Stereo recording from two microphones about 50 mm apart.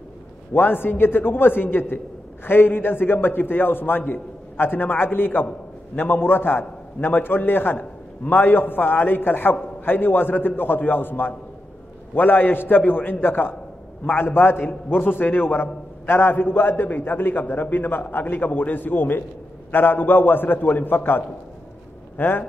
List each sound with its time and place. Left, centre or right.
0.5 s a man's voice: left